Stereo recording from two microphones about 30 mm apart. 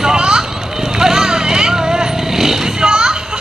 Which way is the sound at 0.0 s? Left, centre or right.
Right.